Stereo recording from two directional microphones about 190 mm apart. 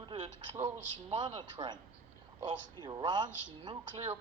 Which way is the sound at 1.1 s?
25° right (ahead or behind).